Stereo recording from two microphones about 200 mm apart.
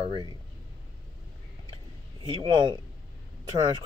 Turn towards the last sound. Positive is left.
turn(degrees=-20)  # may be behind; listen again after turning